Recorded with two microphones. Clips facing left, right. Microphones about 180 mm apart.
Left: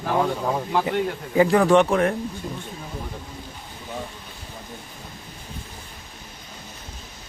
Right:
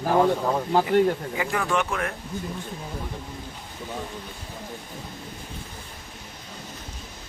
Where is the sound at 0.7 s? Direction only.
40° right (ahead or behind).